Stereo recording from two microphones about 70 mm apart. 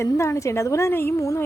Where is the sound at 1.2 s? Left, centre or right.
Left.